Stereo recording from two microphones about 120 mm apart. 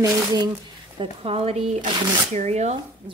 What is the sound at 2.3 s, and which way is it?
Rub, 75° right (ahead or behind).